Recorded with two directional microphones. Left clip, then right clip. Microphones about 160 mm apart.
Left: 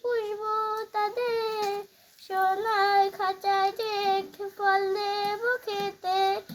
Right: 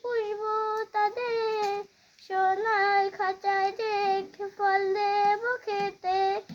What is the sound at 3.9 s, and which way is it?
Child singing, 40° right (ahead or behind).